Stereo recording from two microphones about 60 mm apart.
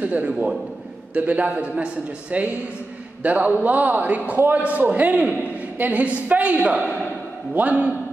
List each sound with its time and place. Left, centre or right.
0.0 s a man's voice: right